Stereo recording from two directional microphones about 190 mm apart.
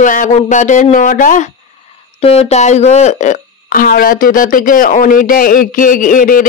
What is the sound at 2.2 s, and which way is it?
Speech, 30° left (ahead or behind).